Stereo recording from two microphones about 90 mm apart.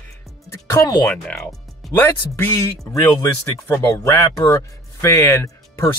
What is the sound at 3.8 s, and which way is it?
Speech, 30° left (ahead or behind).